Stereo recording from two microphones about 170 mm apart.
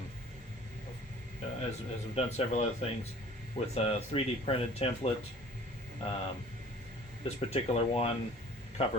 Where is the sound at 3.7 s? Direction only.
35° left (ahead or behind).